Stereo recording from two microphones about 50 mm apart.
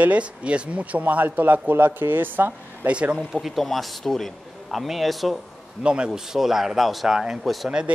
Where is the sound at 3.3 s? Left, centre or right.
Centre.